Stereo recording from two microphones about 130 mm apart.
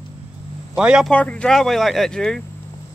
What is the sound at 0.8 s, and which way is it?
Speech, 10° right (ahead or behind).